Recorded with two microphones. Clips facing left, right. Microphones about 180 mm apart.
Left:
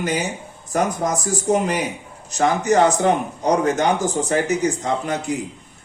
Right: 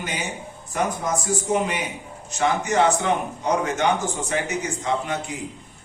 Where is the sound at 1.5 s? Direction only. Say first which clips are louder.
Left 6 dB; 40° left (ahead or behind).